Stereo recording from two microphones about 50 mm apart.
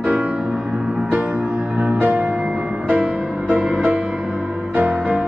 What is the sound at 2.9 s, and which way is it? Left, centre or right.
Music, right.